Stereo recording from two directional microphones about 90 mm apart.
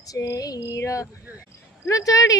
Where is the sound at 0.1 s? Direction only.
40° left (ahead or behind).